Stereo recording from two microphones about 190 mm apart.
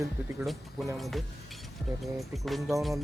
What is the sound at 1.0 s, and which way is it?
Speech, centre (ahead or behind).